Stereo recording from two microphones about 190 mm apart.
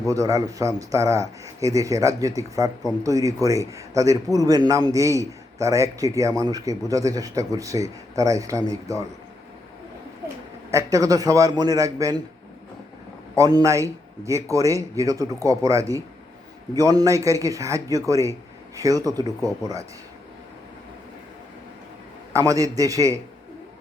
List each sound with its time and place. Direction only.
0.0 s a man's voice: 15° right (ahead or behind)
10.7 s a man's voice: 15° right (ahead or behind)
13.3 s a man's voice: 20° right (ahead or behind)
22.3 s a man's voice: 15° right (ahead or behind)